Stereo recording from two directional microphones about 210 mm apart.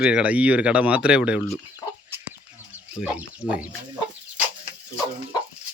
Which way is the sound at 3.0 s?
5° right (ahead or behind).